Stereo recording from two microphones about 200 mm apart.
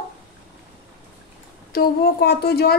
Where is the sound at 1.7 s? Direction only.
50° left (ahead or behind).